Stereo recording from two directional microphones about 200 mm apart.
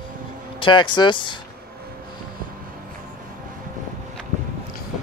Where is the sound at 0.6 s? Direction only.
25° left (ahead or behind).